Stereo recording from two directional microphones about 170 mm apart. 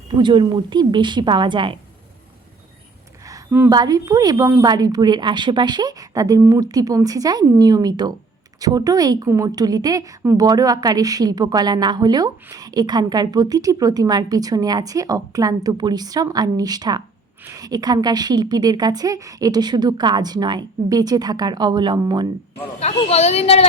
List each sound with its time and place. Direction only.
0.1 s a woman's voice: 25° right (ahead or behind)
3.2 s a sound: 15° right (ahead or behind)
3.8 s a woman's voice: 20° right (ahead or behind)
22.8 s speech: 40° left (ahead or behind)